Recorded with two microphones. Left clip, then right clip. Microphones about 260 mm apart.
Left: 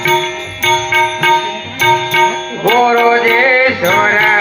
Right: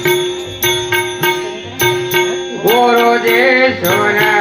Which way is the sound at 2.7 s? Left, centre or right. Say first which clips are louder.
Left 1 dB; left.